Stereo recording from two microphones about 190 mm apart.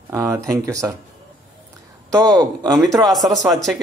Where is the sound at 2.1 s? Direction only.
20° right (ahead or behind).